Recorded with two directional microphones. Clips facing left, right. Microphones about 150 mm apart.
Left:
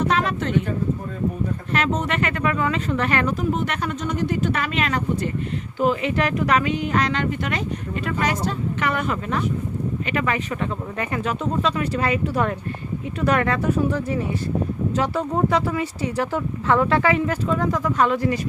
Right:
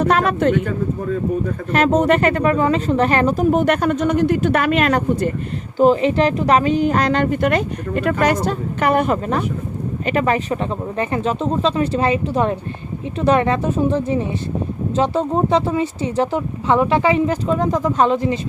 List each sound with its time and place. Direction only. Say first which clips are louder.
0.0 s speech: right 6 dB; 55° right (ahead or behind)
1.7 s a woman's voice: right 9 dB; 45° right (ahead or behind)
3.5 s speech: right 9 dB; 55° right (ahead or behind)
5.8 s a woman's voice: right 7 dB; 35° right (ahead or behind)